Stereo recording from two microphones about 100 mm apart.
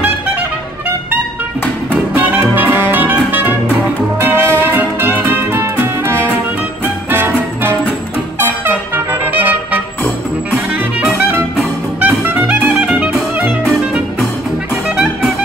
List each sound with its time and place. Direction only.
2.1 s music: 15° right (ahead or behind)
8.4 s music: 20° right (ahead or behind)
11.1 s music: 15° right (ahead or behind)